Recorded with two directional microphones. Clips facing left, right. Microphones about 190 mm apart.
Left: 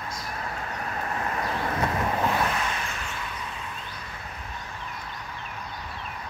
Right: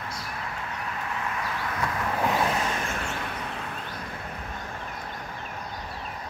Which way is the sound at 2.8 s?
50° right (ahead or behind).